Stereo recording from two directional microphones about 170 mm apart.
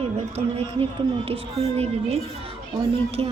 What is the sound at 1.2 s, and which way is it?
Speech, 35° right (ahead or behind).